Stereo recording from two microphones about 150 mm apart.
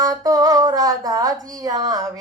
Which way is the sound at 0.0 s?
25° right (ahead or behind).